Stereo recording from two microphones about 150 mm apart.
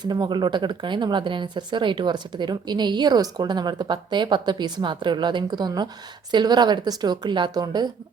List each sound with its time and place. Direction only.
0.0 s speech: 30° right (ahead or behind)